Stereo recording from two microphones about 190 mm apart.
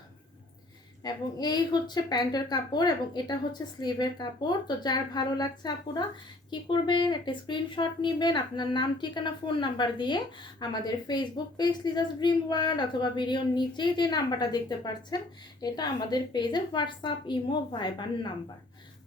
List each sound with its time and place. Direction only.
1.0 s a woman's voice: 20° left (ahead or behind)